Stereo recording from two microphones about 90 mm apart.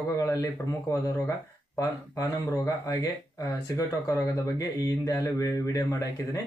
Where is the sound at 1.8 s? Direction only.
35° left (ahead or behind).